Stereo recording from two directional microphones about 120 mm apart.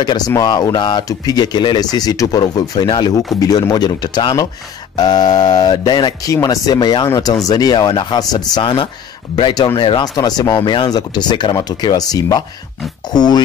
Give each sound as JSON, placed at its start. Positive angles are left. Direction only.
{"t": 0.4, "sound": "speech", "side_deg": 35}